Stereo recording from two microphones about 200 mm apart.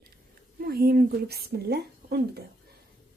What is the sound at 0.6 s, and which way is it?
A woman's voice, 50° right (ahead or behind).